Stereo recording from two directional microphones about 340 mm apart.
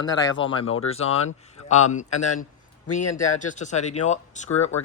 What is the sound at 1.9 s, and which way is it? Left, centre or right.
Speech, left.